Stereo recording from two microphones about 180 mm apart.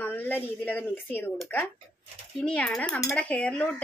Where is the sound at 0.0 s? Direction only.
10° left (ahead or behind).